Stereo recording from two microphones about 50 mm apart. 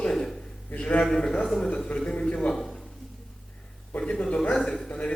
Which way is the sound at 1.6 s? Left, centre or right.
Centre.